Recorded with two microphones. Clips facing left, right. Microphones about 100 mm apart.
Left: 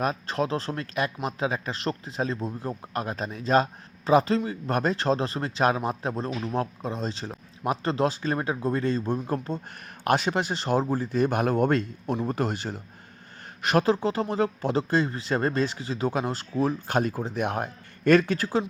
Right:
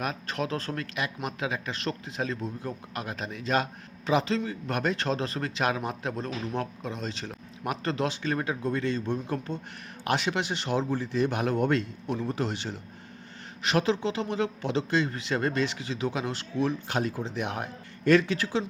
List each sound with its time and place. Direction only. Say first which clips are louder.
0.0 s speech: left 5 dB; 35° left (ahead or behind)